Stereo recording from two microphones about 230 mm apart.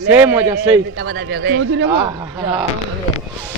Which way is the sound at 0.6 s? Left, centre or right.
Right.